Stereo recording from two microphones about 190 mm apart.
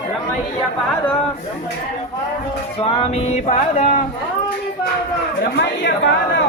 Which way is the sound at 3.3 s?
40° left (ahead or behind).